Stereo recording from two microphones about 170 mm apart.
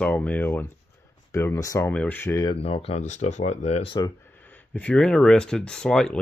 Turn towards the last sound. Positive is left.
turn(degrees=5)  # may be behind; listen again after turning